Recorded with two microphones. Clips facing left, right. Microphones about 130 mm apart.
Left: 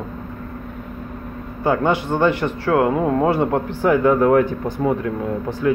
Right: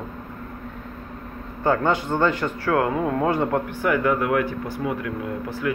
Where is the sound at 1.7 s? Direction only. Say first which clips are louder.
Left 2 dB; 15° left (ahead or behind); by 4.4 s 35° left (ahead or behind).